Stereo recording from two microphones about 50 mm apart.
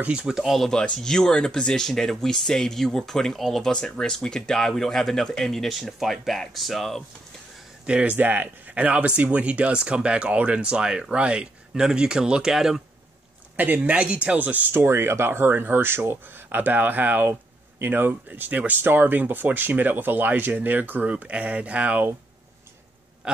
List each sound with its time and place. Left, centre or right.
0.3 s speech: centre
0.6 s speech: centre
8.0 s speech: right; by 12.8 s centre
13.6 s speech: right
14.8 s speech: right
16.4 s speech: right
21.1 s speech: right
23.2 s a sound: right